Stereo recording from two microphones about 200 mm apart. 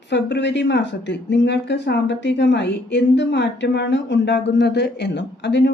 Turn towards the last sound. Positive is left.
turn(degrees=60)  # may be behind; listen again after turning